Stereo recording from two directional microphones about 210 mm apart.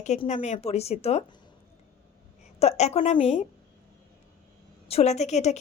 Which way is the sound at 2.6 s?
30° left (ahead or behind).